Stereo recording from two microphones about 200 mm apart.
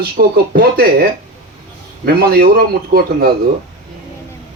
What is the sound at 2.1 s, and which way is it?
Speech, 50° right (ahead or behind).